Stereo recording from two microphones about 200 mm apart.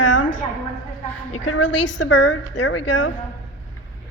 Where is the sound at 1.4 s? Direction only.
65° left (ahead or behind).